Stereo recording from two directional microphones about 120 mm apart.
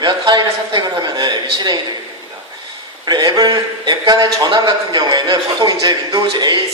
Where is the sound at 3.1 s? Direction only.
35° right (ahead or behind).